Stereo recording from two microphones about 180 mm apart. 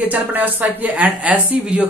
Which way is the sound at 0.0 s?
10° right (ahead or behind).